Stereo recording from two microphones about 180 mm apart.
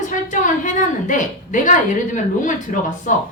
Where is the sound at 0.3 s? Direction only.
45° left (ahead or behind).